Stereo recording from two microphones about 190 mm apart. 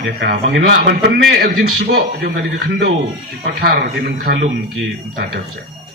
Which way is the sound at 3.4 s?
55° right (ahead or behind).